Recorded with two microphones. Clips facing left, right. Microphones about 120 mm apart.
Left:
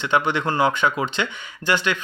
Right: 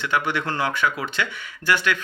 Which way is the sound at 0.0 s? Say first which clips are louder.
Left 3 dB; 20° left (ahead or behind).